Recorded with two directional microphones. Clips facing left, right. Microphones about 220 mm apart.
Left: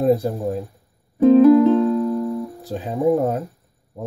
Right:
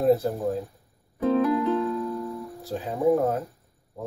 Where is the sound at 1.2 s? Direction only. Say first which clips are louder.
Left 12 dB; 25° left (ahead or behind).